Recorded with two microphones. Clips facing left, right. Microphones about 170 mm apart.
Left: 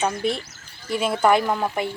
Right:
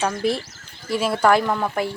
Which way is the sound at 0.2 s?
Centre (ahead or behind).